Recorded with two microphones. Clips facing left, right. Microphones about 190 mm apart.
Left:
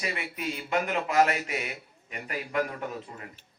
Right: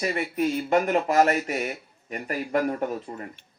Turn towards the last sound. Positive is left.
turn(degrees=-40)  # may be behind; listen again after turning